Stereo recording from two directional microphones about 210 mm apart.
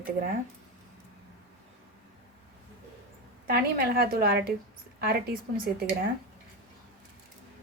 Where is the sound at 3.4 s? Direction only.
45° right (ahead or behind).